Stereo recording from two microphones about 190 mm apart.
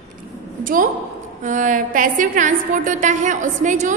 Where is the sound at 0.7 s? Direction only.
45° right (ahead or behind).